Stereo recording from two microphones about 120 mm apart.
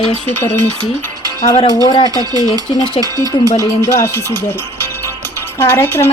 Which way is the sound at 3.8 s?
25° left (ahead or behind).